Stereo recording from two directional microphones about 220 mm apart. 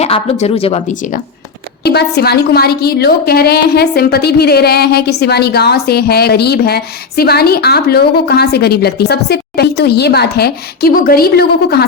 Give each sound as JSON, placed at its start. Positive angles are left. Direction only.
{"t": 0.0, "sound": "speech", "side_deg": 30}
{"t": 1.8, "sound": "a woman's voice", "side_deg": 50}